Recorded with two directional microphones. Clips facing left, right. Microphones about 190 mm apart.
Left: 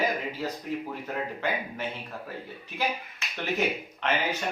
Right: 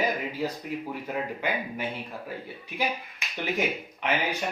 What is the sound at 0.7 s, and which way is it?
Speech, 10° right (ahead or behind).